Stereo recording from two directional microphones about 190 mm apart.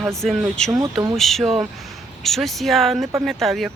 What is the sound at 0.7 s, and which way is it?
Speech, 15° right (ahead or behind).